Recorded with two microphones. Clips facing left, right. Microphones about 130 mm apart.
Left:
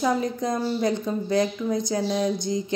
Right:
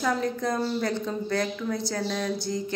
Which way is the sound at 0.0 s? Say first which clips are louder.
Left 2 dB; 15° left (ahead or behind).